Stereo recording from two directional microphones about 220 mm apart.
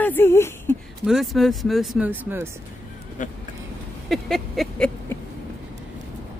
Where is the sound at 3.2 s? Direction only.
35° left (ahead or behind).